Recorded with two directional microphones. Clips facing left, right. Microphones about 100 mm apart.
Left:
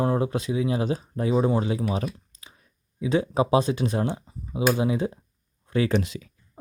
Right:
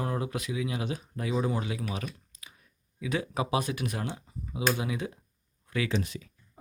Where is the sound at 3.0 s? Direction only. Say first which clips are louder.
Left 8 dB; 30° left (ahead or behind).